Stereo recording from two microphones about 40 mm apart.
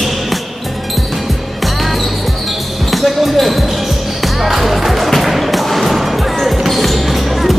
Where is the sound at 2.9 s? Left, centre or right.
Centre.